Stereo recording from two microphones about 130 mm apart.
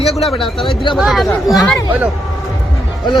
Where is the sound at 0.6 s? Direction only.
45° left (ahead or behind).